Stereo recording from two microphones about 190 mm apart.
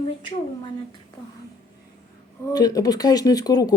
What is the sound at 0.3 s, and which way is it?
Speech, 25° left (ahead or behind).